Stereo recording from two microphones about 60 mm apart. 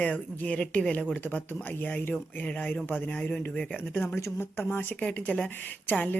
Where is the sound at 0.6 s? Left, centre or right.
Centre.